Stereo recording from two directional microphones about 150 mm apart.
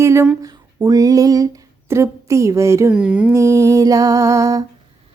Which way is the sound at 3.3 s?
20° right (ahead or behind).